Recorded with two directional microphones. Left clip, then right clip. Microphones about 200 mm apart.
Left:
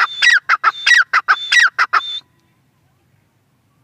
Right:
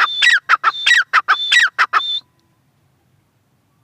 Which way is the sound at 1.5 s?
15° right (ahead or behind).